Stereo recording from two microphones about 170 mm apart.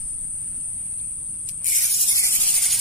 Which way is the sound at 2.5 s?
Centre (ahead or behind).